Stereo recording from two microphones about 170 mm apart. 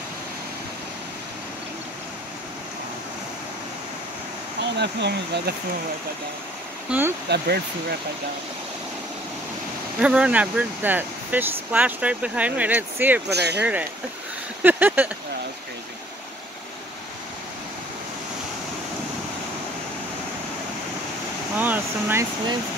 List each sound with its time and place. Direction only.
4.7 s speech: 80° right
6.9 s speech: 10° right (ahead or behind)
7.2 s speech: 70° right (ahead or behind)
9.9 s speech: 5° right (ahead or behind)
13.3 s speech: 75° right (ahead or behind)
13.6 s speech: 10° right (ahead or behind)
21.5 s speech: 10° right (ahead or behind)